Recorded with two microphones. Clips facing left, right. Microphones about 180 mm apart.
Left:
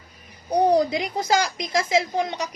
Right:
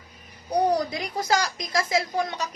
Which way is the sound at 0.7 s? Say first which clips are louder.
Left 5 dB; 25° left (ahead or behind).